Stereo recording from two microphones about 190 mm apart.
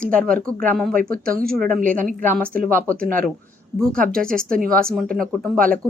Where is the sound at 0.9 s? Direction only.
50° right (ahead or behind).